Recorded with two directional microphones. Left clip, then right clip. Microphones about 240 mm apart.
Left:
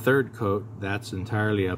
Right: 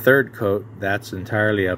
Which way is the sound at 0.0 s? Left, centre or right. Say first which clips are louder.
Right 7 dB; centre.